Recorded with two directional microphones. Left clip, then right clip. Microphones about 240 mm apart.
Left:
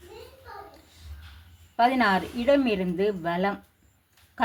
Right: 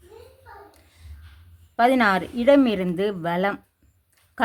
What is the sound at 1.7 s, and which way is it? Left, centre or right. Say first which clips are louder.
Speech: right 3 dB; right.